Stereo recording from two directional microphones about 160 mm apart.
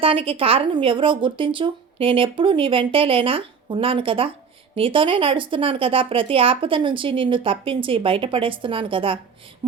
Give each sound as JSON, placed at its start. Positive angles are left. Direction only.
{"t": 0.0, "sound": "speech", "side_deg": -35}